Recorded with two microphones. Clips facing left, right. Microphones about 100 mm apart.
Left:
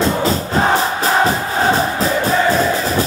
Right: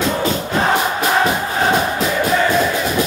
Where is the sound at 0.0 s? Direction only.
35° left (ahead or behind).